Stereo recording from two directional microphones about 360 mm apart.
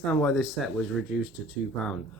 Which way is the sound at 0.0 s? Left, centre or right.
Centre.